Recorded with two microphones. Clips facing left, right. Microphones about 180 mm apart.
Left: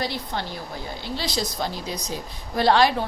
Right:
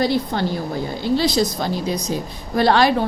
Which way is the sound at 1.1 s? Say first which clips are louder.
Right 10 dB; 50° right (ahead or behind).